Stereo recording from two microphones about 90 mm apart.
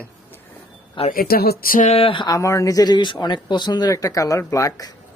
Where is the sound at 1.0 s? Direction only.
80° left.